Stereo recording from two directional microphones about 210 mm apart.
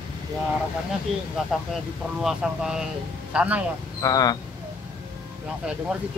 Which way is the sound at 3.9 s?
15° left (ahead or behind).